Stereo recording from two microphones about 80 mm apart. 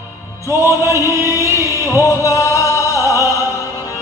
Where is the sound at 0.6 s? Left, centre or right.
Right.